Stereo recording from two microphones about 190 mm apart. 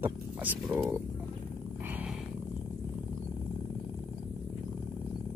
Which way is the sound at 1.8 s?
5° right (ahead or behind).